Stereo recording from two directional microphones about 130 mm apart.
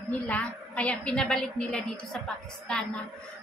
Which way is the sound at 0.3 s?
10° left (ahead or behind).